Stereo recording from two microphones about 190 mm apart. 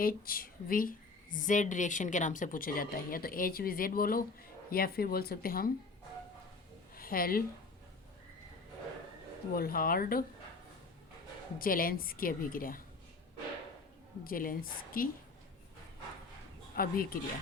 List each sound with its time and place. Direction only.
0.0 s a woman's voice: 50° left (ahead or behind)
6.9 s speech: 50° left (ahead or behind)
9.5 s a woman's voice: 50° left (ahead or behind)
11.6 s a woman's voice: 50° left (ahead or behind)
14.3 s a woman's voice: 50° left (ahead or behind)
16.7 s a woman's voice: 50° left (ahead or behind)